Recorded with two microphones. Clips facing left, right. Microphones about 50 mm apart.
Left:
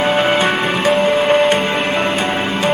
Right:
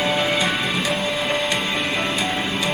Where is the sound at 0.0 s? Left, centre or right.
Left.